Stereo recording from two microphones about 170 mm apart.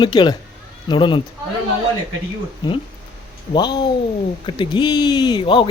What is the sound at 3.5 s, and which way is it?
Speech, 25° left (ahead or behind).